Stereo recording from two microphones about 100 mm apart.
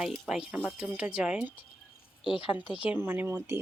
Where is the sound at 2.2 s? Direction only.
60° left (ahead or behind).